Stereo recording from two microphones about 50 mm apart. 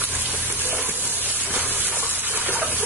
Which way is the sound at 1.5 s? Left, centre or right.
Right.